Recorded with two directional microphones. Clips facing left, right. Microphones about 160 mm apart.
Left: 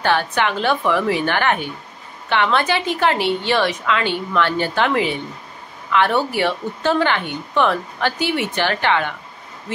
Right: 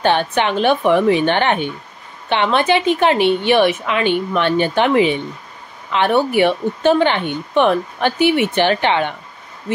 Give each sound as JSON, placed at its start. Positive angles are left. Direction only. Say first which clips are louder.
{"t": 0.0, "sound": "speech", "louder": "right 3 dB", "side_deg": -20}